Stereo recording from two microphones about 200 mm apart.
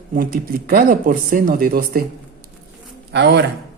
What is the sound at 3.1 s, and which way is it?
Speech, 55° right (ahead or behind).